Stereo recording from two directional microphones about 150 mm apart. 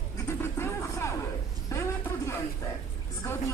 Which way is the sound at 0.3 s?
20° left (ahead or behind).